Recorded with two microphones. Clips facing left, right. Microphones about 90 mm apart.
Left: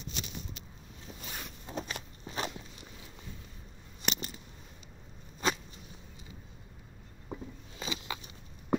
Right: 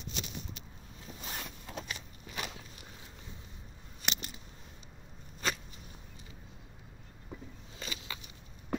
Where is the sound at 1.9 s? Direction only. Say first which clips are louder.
Left 3 dB; 35° left (ahead or behind).